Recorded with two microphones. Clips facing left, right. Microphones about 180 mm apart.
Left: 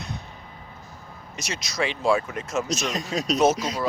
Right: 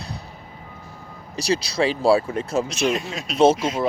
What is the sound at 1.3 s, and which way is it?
Speech, 35° right (ahead or behind).